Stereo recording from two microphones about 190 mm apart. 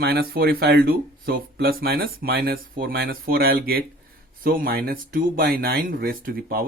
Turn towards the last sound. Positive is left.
turn(degrees=-50)  # may be behind; listen again after turning